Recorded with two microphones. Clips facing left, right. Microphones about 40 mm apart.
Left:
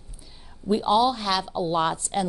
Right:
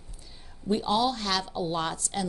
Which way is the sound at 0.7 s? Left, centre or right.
Centre.